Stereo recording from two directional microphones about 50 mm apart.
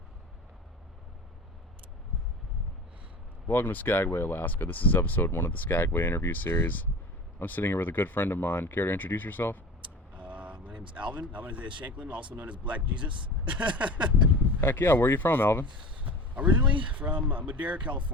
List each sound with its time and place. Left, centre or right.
3.4 s speech: left
10.2 s vehicle: right
10.7 s speech: right
14.6 s speech: left
16.0 s speech: right